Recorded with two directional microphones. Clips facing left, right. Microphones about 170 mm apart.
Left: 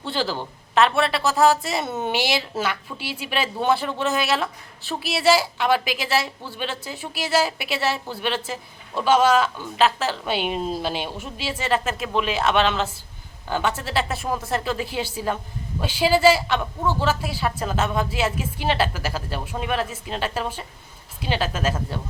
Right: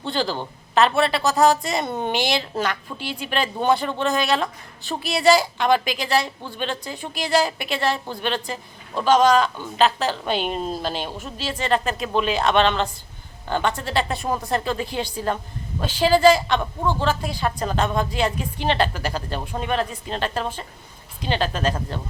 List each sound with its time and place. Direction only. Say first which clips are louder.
0.0 s speech: right 1 dB; 5° left (ahead or behind)